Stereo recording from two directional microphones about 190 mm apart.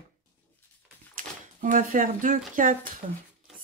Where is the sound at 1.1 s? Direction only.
45° right (ahead or behind).